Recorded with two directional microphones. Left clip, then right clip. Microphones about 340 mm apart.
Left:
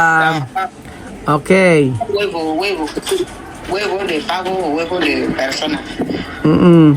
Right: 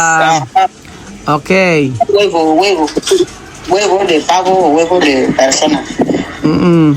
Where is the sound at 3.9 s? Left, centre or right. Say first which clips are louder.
Right 8 dB; centre.